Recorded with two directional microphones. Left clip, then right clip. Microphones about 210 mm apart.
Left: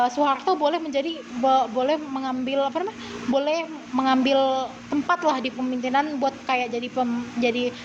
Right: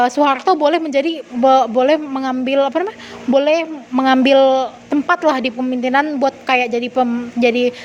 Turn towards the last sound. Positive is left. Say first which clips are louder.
# right 9 dB
turn(degrees=-50)  # may be behind; listen again after turning